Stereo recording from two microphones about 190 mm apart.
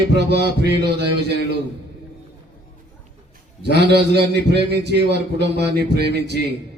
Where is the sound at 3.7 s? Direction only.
60° right (ahead or behind).